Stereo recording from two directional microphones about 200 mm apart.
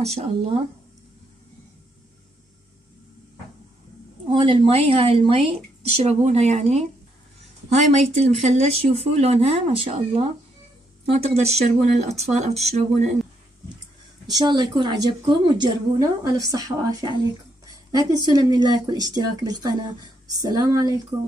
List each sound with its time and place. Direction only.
0.0 s speech: 30° right (ahead or behind)
4.3 s a woman's voice: 30° right (ahead or behind)
7.9 s speech: 35° right (ahead or behind)
14.2 s a woman's voice: 20° right (ahead or behind)